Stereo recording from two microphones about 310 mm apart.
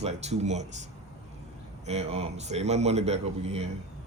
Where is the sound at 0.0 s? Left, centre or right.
Right.